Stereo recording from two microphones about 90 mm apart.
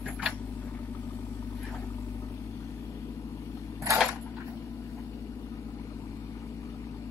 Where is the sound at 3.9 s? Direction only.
35° right (ahead or behind).